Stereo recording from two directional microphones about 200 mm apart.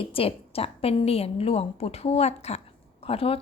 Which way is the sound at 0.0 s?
30° left (ahead or behind).